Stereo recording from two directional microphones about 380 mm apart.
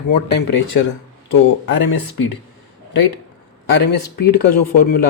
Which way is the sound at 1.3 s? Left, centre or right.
Left.